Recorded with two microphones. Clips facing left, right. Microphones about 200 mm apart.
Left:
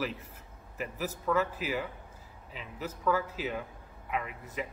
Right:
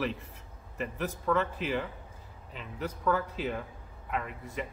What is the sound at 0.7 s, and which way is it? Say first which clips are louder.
A man's voice: right 2 dB; 5° left (ahead or behind).